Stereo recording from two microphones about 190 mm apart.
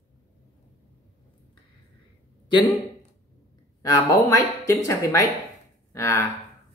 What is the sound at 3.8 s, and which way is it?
Speech, 15° left (ahead or behind).